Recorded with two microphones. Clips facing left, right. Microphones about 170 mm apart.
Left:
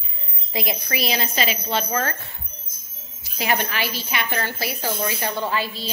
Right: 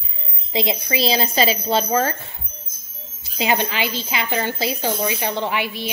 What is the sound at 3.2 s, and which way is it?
A woman's voice, 25° right (ahead or behind).